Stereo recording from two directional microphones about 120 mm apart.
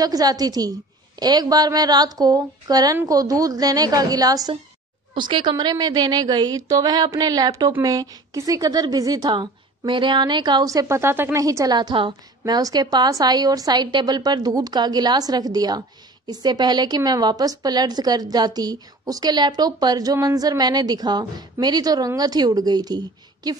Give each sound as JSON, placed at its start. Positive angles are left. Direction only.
{"t": 0.0, "sound": "a woman's voice", "side_deg": -30}
{"t": 11.4, "sound": "a woman's voice", "side_deg": -30}